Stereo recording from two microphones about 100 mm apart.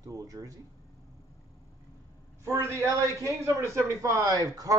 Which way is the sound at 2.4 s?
30° right (ahead or behind).